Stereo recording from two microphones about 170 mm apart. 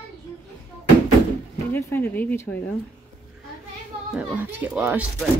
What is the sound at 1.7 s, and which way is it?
Speech, 10° left (ahead or behind).